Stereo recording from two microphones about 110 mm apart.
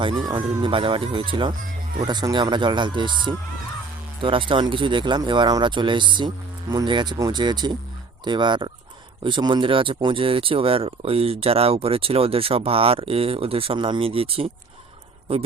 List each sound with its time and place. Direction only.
0.6 s speech: 50° right (ahead or behind)